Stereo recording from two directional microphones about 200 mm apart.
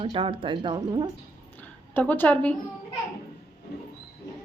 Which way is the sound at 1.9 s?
10° left (ahead or behind).